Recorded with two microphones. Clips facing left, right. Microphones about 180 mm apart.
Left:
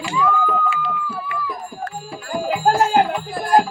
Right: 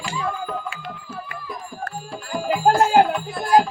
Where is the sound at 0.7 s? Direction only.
45° right (ahead or behind).